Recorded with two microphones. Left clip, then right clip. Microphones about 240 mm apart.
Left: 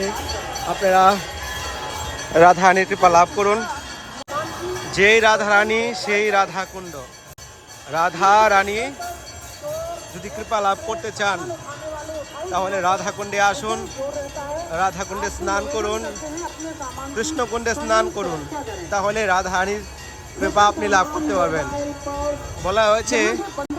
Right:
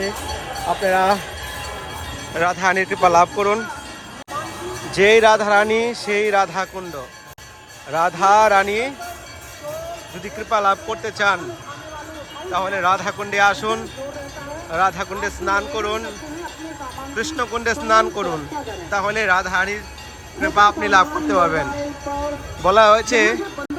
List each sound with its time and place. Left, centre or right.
0.9 s a man's voice: centre
2.3 s speech: left
2.7 s a man's voice: centre
4.9 s a man's voice: centre
7.9 s a man's voice: centre
10.3 s speech: centre
12.5 s speech: centre
17.2 s a man's voice: centre